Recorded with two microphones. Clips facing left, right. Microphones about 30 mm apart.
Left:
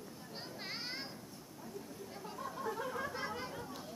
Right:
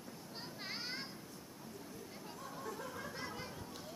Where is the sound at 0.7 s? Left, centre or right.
Centre.